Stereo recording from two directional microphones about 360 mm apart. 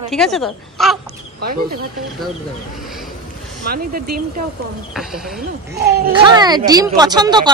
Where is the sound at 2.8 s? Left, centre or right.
Centre.